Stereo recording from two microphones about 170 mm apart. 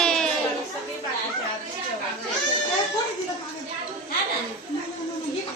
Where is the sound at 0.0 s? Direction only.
5° left (ahead or behind).